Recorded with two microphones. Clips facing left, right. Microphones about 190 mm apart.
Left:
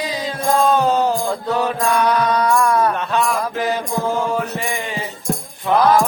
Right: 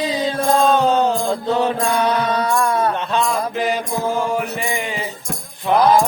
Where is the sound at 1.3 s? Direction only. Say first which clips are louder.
Right 2 dB; 25° right (ahead or behind).